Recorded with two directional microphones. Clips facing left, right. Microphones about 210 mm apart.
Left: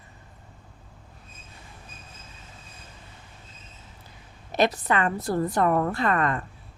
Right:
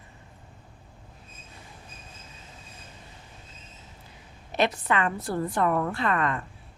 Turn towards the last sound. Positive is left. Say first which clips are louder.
# left 2 dB
turn(degrees=40)  # may be behind; listen again after turning